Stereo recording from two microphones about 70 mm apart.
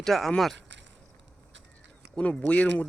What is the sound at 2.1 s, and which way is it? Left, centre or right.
Speech, centre.